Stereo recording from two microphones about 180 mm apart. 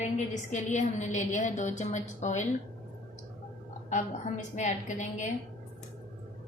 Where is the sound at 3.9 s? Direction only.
45° left (ahead or behind).